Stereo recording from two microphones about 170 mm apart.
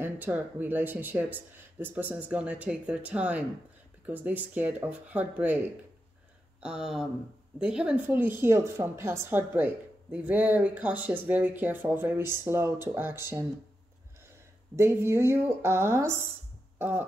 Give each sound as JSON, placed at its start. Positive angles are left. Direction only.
{"t": 0.0, "sound": "speech", "side_deg": -10}
{"t": 6.6, "sound": "speech", "side_deg": -5}
{"t": 14.8, "sound": "speech", "side_deg": -15}
{"t": 16.7, "sound": "music", "side_deg": -10}